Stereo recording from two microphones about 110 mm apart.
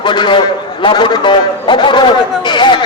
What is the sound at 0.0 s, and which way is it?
A man's voice, 45° left (ahead or behind).